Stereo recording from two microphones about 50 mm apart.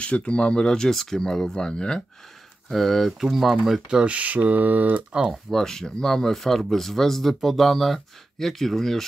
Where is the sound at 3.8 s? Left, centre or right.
Right.